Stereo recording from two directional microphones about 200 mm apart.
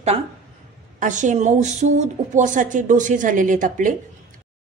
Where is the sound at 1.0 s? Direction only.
40° right (ahead or behind).